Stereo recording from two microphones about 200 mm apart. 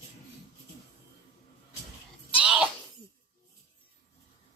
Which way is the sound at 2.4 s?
5° right (ahead or behind).